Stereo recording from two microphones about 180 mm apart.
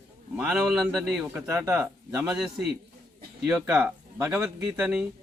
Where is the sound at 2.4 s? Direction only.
Centre (ahead or behind).